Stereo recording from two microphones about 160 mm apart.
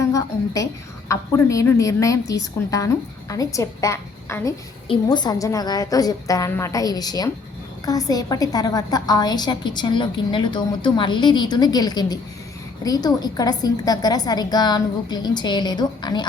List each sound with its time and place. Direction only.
0.0 s a woman's voice: 20° left (ahead or behind)